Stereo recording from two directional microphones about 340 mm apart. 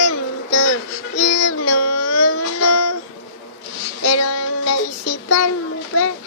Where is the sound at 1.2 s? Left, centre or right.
Left.